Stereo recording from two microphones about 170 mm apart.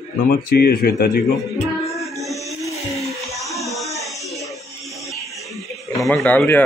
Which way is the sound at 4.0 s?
Centre (ahead or behind).